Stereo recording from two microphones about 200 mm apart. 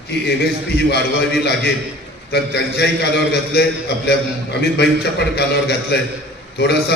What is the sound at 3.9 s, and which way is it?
A man's voice, 55° left (ahead or behind).